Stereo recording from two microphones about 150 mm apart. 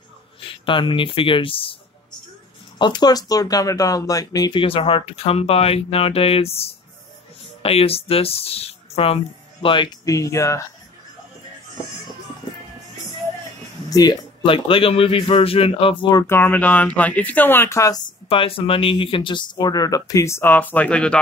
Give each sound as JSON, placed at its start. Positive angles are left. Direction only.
{"t": 0.4, "sound": "speech", "side_deg": 35}
{"t": 2.8, "sound": "speech", "side_deg": 30}
{"t": 13.8, "sound": "a man's voice", "side_deg": 25}
{"t": 18.3, "sound": "a man's voice", "side_deg": 35}